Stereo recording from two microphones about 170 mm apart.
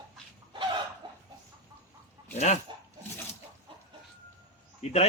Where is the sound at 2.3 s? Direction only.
40° left (ahead or behind).